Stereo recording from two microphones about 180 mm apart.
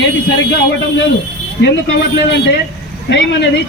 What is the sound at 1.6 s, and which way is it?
Speech, 70° left (ahead or behind).